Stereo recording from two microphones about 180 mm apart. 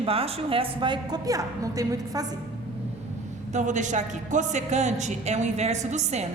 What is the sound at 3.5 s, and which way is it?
A woman's voice, 45° right (ahead or behind).